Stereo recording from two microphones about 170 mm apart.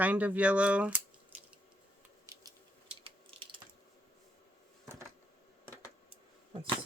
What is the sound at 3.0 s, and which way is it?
Typing, 30° right (ahead or behind).